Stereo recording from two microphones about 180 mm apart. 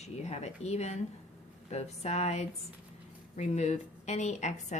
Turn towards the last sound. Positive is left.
turn(degrees=40)  # may be behind; listen again after turning